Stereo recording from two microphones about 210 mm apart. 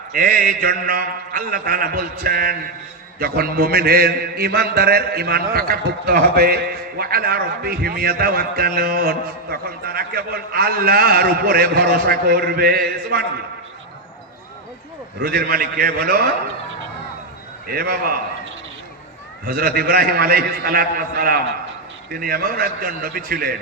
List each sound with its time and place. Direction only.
0.1 s a man's voice: 45° right (ahead or behind)
15.2 s a man's voice: 45° right (ahead or behind)
17.7 s a man's voice: 45° right (ahead or behind)
19.5 s a man's voice: 45° right (ahead or behind)